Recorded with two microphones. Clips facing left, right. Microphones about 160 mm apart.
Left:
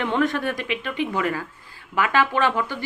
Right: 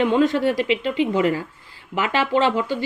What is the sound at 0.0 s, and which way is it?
A woman's voice, 20° right (ahead or behind).